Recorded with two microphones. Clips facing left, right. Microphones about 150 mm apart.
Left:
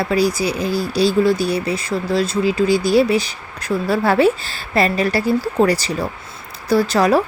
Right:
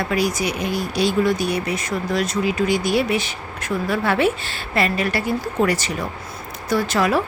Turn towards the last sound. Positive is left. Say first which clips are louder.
# left 4 dB
turn(degrees=40)  # may be behind; listen again after turning